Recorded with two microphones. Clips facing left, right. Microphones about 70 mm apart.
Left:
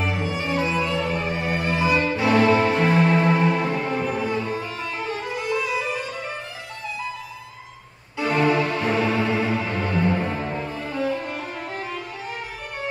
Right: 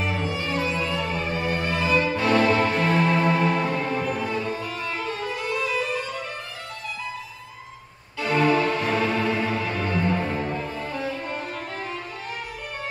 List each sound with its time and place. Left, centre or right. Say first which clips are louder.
0.0 s music: left 1 dB; centre
8.2 s music: left 1 dB; centre